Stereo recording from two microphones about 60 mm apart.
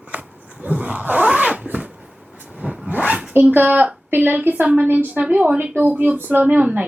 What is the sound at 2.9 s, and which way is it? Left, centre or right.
Speech, right.